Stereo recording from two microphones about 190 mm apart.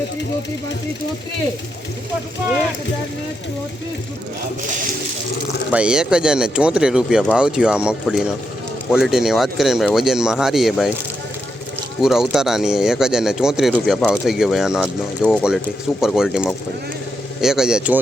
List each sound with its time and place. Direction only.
5.7 s speech: 5° right (ahead or behind)
12.0 s speech: centre (ahead or behind)